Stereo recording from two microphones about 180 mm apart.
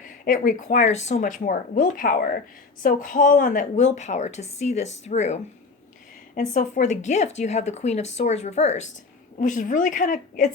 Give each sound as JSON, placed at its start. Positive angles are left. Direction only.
{"t": 0.0, "sound": "a woman's voice", "side_deg": 50}